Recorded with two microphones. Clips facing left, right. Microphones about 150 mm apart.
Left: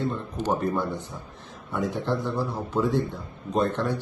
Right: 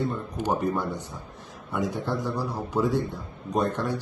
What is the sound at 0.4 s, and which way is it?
Speech, 15° right (ahead or behind).